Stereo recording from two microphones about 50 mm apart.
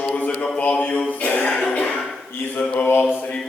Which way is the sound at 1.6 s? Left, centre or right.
Centre.